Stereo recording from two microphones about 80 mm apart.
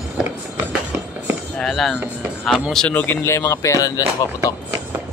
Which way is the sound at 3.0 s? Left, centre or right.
Left.